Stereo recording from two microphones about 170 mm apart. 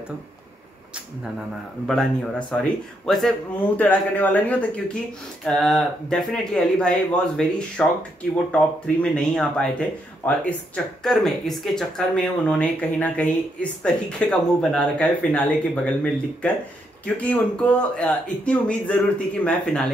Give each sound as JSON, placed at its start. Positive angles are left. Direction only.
{"t": 1.9, "sound": "a man's voice", "side_deg": 5}